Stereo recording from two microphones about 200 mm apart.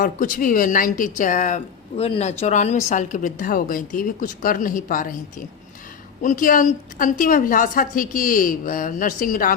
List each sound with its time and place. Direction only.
0.0 s a woman's voice: 40° left (ahead or behind)
6.2 s a woman's voice: 45° left (ahead or behind)